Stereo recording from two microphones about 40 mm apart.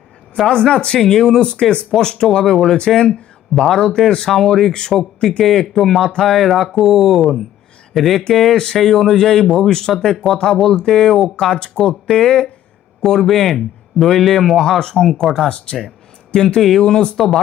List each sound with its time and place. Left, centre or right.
0.5 s speech: left
0.9 s speech: centre
1.2 s speech: left
2.2 s speech: centre
2.7 s speech: centre
4.7 s speech: centre
5.4 s speech: centre
11.8 s speech: left
13.0 s speech: centre
15.2 s speech: centre
15.5 s speech: left
16.6 s speech: centre
16.8 s speech: left
17.2 s speech: centre